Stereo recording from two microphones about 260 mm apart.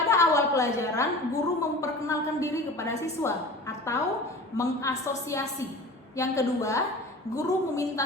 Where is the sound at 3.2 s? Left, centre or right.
Centre.